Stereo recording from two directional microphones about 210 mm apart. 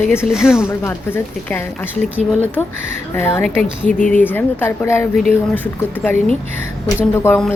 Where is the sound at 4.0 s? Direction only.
40° left (ahead or behind).